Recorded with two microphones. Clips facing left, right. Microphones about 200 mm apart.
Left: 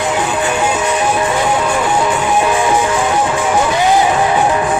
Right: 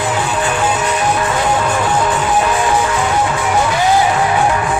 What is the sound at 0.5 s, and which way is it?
Music, 20° left (ahead or behind).